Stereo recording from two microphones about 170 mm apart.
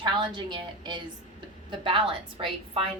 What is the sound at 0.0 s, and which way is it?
A woman's voice, 30° right (ahead or behind).